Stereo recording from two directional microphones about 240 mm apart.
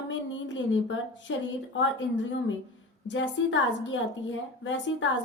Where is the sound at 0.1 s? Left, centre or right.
Left.